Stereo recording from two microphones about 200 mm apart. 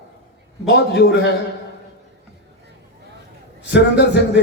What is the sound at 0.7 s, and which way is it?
Speech, 55° left (ahead or behind).